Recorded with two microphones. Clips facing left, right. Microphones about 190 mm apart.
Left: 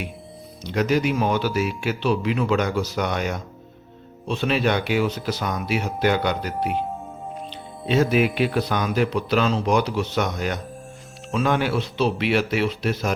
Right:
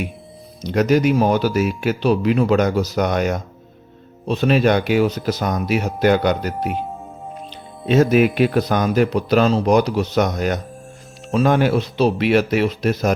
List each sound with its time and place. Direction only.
0.6 s speech: 45° right (ahead or behind)
7.9 s speech: 45° right (ahead or behind)